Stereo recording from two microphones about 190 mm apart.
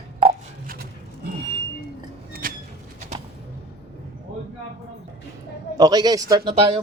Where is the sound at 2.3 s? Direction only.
50° right (ahead or behind).